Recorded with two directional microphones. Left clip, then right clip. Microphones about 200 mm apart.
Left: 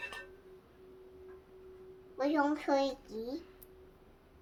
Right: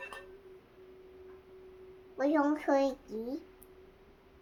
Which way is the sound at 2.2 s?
20° right (ahead or behind).